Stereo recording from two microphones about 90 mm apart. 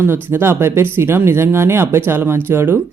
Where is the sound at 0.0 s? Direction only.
25° right (ahead or behind).